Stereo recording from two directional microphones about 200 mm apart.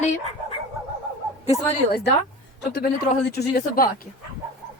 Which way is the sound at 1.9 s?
50° left (ahead or behind).